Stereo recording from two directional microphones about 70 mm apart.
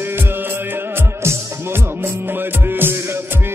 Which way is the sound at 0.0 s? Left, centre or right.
Right.